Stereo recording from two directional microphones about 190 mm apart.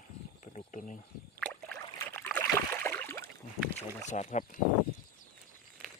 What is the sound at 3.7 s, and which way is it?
Speech, 40° left (ahead or behind).